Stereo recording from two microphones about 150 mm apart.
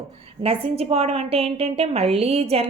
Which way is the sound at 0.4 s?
40° right (ahead or behind).